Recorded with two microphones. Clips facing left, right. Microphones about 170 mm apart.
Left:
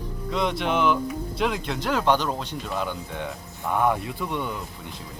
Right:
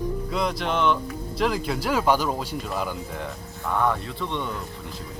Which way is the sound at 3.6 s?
15° left (ahead or behind).